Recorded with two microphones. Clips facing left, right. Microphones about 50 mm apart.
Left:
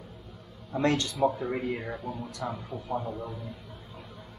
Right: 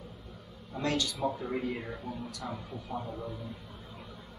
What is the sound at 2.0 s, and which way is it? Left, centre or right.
A man's voice, centre.